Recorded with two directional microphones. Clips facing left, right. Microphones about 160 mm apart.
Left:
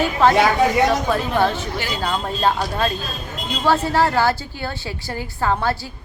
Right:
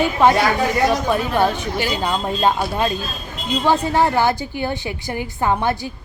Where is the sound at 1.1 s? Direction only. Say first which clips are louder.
Right 1 dB; 15° right (ahead or behind).